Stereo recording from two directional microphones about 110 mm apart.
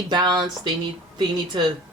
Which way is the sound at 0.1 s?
40° right (ahead or behind).